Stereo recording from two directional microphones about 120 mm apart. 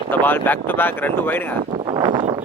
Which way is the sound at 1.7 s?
40° right (ahead or behind).